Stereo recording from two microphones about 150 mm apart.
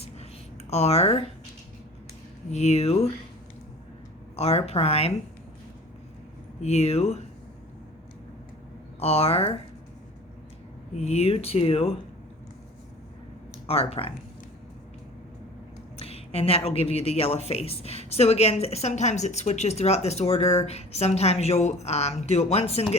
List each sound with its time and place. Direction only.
0.7 s speech: 45° left (ahead or behind)
2.5 s speech: 45° left (ahead or behind)
4.4 s speech: 45° left (ahead or behind)
6.6 s speech: 45° left (ahead or behind)
9.0 s speech: 40° left (ahead or behind)
10.9 s speech: 45° left (ahead or behind)
13.7 s speech: 40° left (ahead or behind)
16.0 s speech: 40° left (ahead or behind)